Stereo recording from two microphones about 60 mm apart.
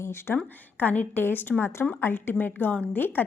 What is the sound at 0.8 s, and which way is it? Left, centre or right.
A woman's voice, left.